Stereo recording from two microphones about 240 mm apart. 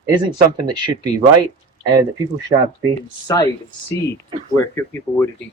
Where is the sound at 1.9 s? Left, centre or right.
Centre.